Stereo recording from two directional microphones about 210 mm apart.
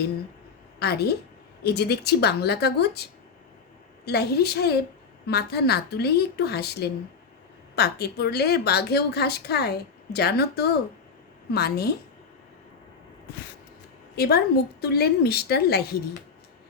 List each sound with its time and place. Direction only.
0.8 s a woman's voice: 50° left (ahead or behind)
4.0 s a woman's voice: 50° left (ahead or behind)
14.2 s a woman's voice: 50° left (ahead or behind)